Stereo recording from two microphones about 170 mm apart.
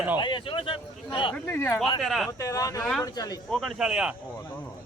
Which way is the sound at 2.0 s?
Centre (ahead or behind).